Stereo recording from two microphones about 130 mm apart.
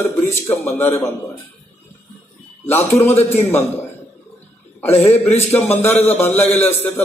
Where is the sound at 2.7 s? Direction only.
20° left (ahead or behind).